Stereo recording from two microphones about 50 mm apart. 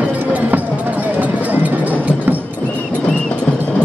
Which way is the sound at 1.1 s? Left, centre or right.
Right.